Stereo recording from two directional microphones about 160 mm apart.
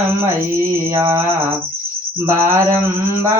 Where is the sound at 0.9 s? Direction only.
15° right (ahead or behind).